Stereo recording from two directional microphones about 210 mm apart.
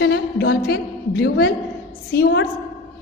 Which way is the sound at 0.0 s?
55° left (ahead or behind).